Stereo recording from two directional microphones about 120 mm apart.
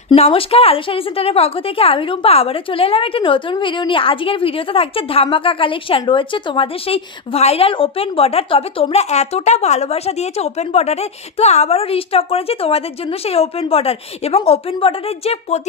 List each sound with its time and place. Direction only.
0.1 s a woman's voice: 55° left (ahead or behind)